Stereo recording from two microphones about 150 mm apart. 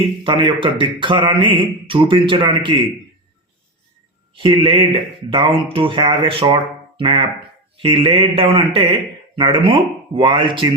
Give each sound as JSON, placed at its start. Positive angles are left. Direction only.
{"t": 0.3, "sound": "a man's voice", "side_deg": -30}
{"t": 4.4, "sound": "a man's voice", "side_deg": -35}